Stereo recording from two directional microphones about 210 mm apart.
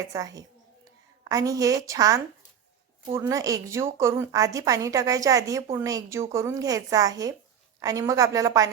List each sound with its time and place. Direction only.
0.1 s a woman's voice: 15° right (ahead or behind)